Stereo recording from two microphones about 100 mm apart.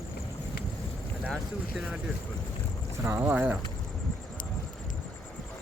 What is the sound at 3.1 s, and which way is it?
Speech, 20° right (ahead or behind).